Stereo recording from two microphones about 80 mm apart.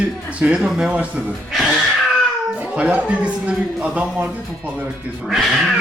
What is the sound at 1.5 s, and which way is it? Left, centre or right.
Music, centre.